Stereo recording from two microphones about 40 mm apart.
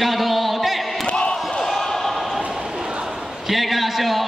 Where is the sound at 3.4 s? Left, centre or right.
Centre.